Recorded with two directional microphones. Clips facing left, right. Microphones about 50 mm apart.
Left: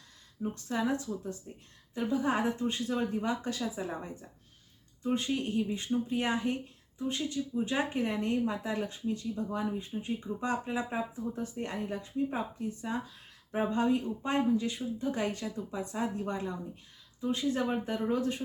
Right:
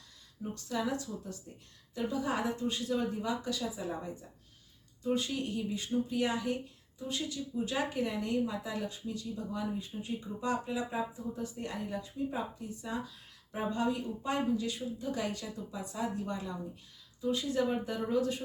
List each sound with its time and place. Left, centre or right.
0.5 s speech: left